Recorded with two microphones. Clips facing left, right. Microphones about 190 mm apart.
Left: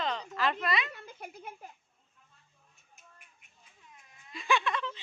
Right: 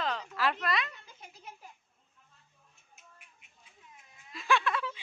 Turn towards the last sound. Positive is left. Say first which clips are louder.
# right 1 dB
turn(degrees=-5)  # may be behind; listen again after turning